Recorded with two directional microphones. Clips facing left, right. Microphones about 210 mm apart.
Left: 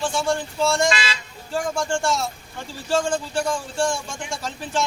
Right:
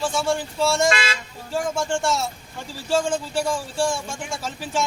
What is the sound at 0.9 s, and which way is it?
Speech, 50° right (ahead or behind).